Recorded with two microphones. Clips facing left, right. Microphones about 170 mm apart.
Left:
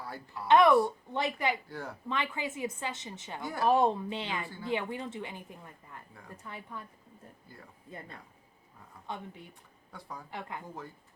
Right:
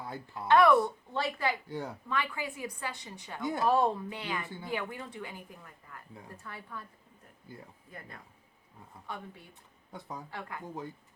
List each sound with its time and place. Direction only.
0.0 s speech: 20° right (ahead or behind)
0.4 s a woman's voice: 20° left (ahead or behind)
3.4 s speech: 20° right (ahead or behind)
3.7 s a woman's voice: 20° left (ahead or behind)
4.4 s speech: 20° right (ahead or behind)
4.7 s a woman's voice: 25° left (ahead or behind)
7.9 s a woman's voice: 25° left (ahead or behind)
9.9 s speech: 20° right (ahead or behind)